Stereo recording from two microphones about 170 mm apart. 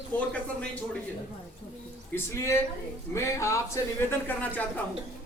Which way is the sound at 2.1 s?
15° left (ahead or behind).